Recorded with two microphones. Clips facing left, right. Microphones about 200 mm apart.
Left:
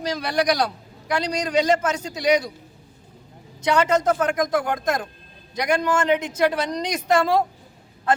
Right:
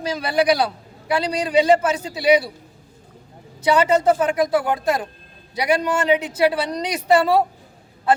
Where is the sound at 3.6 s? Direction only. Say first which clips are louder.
Right 3 dB; 5° right (ahead or behind).